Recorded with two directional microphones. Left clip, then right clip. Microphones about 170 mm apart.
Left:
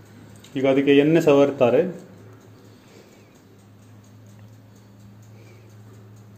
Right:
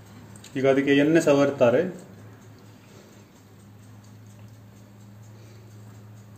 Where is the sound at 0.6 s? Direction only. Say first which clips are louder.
Left 3 dB; 15° left (ahead or behind).